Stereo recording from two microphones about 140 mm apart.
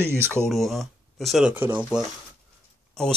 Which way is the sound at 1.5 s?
15° right (ahead or behind).